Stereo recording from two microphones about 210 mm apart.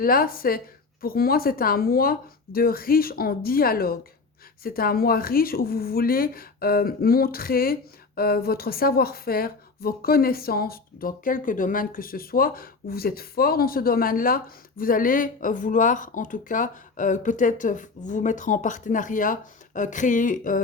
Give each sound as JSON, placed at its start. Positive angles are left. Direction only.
{"t": 0.0, "sound": "speech", "side_deg": 45}